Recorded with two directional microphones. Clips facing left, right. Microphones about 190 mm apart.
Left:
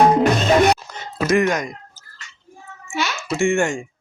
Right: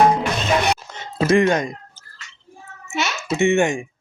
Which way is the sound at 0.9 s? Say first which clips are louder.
Right 2 dB; 25° right (ahead or behind).